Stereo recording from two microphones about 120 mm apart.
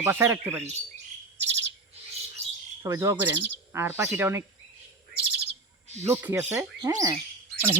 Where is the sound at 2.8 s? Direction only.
20° right (ahead or behind).